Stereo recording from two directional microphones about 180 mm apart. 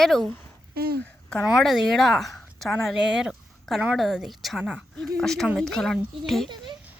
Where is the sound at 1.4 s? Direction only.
Centre (ahead or behind).